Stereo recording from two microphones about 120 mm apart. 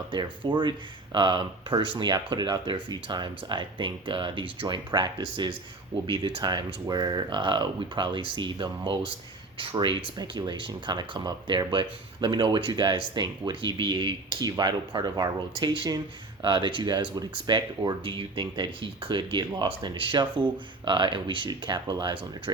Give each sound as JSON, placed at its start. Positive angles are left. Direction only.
{"t": 0.1, "sound": "speech", "side_deg": -40}